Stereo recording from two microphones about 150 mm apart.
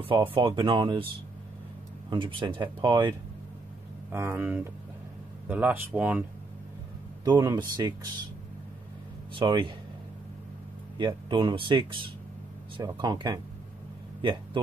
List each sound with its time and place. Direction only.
0.0 s speech: 35° right (ahead or behind)
2.0 s speech: 35° right (ahead or behind)
4.1 s speech: 15° right (ahead or behind)
7.2 s speech: 25° right (ahead or behind)
9.3 s speech: 35° right (ahead or behind)
11.2 s speech: 30° right (ahead or behind)